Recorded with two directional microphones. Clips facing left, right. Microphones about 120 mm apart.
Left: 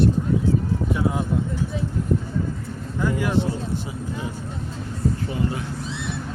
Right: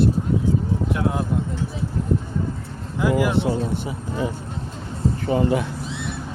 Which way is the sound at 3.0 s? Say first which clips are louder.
Right 4 dB; 5° right (ahead or behind).